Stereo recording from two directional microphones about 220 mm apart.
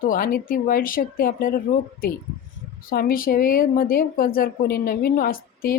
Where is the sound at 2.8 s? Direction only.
40° left (ahead or behind).